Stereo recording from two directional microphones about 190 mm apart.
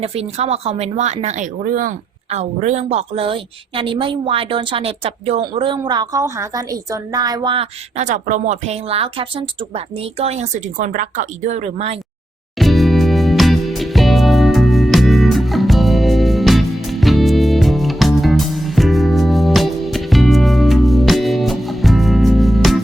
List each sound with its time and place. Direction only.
0.0 s a woman's voice: 35° right (ahead or behind)
12.5 s music: centre (ahead or behind)